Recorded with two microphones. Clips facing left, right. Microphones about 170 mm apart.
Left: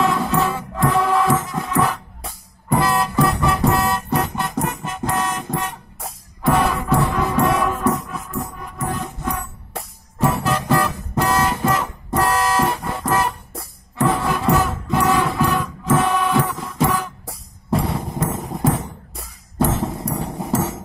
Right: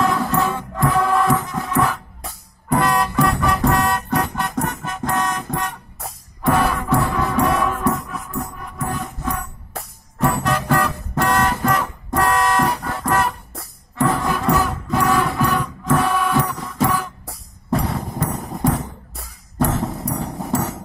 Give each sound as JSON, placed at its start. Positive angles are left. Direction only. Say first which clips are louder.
{"t": 0.0, "sound": "music", "louder": "even", "side_deg": 0}